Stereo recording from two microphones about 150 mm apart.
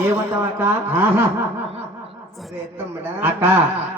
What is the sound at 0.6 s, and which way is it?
Speech, 15° right (ahead or behind).